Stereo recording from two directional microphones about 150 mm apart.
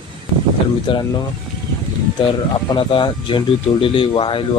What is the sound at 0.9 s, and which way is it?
Speech, 35° left (ahead or behind).